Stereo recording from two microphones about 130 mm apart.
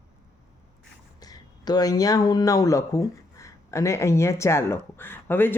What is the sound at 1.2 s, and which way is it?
Speech, 30° left (ahead or behind).